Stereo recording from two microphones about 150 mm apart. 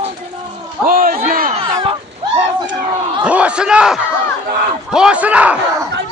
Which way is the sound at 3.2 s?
10° right (ahead or behind).